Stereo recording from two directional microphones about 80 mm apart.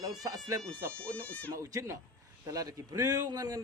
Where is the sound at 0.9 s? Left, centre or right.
Centre.